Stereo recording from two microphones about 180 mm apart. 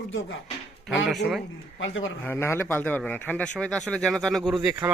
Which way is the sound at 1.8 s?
90° left.